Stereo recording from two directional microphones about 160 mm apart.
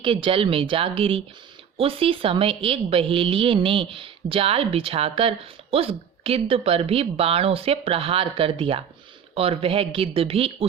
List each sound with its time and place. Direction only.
0.0 s a woman's voice: 35° right (ahead or behind)